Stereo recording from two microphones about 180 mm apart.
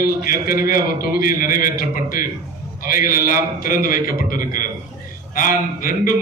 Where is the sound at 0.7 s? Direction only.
55° left (ahead or behind).